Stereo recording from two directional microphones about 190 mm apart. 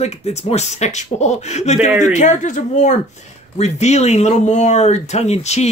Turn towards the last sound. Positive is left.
turn(degrees=35)  # may be behind; listen again after turning